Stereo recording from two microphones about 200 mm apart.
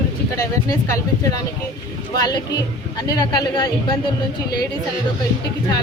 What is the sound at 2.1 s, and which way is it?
Speech, 20° left (ahead or behind).